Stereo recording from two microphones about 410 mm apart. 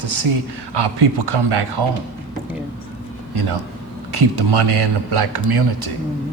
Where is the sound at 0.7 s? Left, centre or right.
Right.